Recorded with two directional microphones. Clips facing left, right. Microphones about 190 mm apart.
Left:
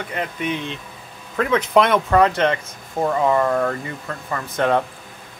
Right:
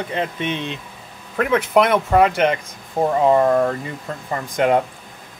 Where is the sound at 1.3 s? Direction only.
10° right (ahead or behind).